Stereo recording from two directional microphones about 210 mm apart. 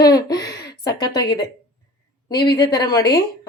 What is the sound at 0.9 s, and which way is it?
A woman's voice, 20° left (ahead or behind).